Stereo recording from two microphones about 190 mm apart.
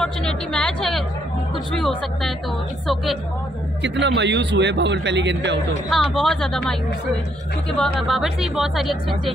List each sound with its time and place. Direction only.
0.0 s a woman's voice: 5° left (ahead or behind)
3.8 s a man's voice: 65° right (ahead or behind)
5.9 s speech: centre (ahead or behind)